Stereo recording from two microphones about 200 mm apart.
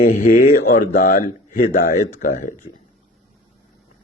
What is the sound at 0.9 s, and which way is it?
Speech, 45° left (ahead or behind).